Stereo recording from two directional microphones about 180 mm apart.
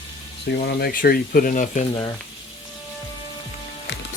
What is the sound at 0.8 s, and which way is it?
Speech, 60° left (ahead or behind).